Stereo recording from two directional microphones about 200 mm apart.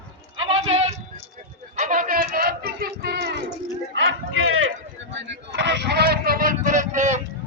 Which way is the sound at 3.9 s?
70° right (ahead or behind).